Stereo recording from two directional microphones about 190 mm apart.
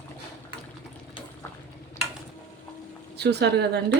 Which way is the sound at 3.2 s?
60° right (ahead or behind).